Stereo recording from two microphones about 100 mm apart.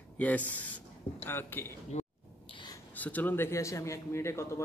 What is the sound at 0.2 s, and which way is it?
Speech, 15° left (ahead or behind).